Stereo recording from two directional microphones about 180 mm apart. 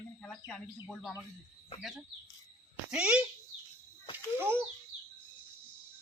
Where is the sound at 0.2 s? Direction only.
5° left (ahead or behind).